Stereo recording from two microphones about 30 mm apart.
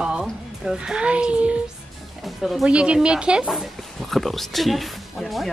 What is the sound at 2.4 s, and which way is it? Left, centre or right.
Speech, centre.